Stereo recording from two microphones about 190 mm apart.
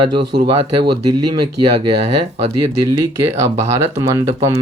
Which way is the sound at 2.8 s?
15° right (ahead or behind).